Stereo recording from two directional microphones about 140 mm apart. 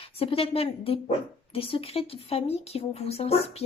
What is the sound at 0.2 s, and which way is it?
Speech, 40° left (ahead or behind).